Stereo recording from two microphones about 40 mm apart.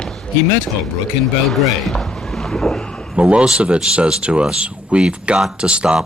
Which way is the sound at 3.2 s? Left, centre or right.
Right.